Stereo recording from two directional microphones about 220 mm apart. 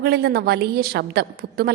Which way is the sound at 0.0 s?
45° right (ahead or behind).